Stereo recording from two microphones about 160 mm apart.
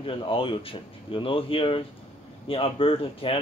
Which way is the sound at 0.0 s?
35° left (ahead or behind).